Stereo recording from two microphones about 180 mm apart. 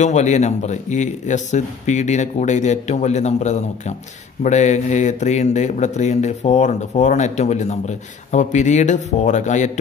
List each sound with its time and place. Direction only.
0.0 s speech: 40° left (ahead or behind)